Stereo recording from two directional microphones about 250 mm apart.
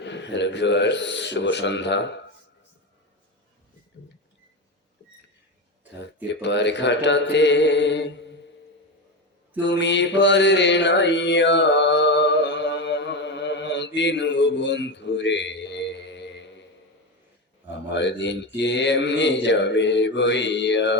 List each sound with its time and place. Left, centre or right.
0.0 s mantra: left
6.4 s mantra: left
9.6 s mantra: left
17.9 s mantra: left